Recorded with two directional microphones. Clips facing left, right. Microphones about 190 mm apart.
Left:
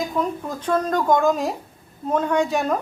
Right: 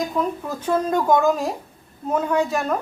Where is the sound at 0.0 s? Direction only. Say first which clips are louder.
Even; 5° right (ahead or behind).